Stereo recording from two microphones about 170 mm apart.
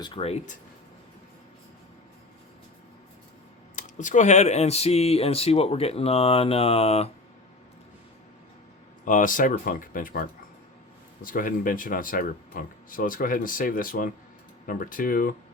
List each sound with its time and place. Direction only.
0.0 s speech: 30° left (ahead or behind)
3.8 s speech: 45° left (ahead or behind)
9.0 s speech: 50° left (ahead or behind)